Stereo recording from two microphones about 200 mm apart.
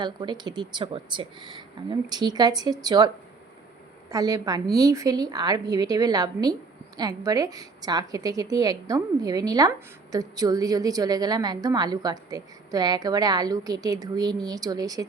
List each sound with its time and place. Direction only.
0.0 s a woman's voice: 20° right (ahead or behind)
4.1 s a woman's voice: 20° right (ahead or behind)